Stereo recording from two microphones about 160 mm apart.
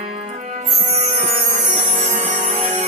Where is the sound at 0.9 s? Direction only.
45° right (ahead or behind).